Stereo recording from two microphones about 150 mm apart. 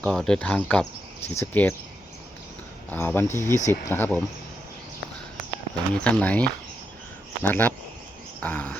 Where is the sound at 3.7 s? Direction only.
15° left (ahead or behind).